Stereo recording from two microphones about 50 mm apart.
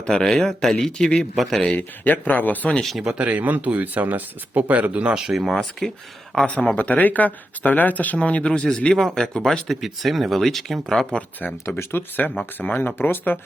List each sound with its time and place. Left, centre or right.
0.1 s speech: centre
1.4 s speech: centre
1.7 s speech: left
3.0 s speech: centre
3.2 s speech: right
5.3 s speech: centre
5.8 s speech: centre
6.3 s speech: left
9.0 s speech: centre
9.6 s speech: centre
11.8 s speech: left